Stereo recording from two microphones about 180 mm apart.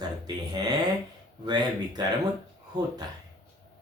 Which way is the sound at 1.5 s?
25° right (ahead or behind).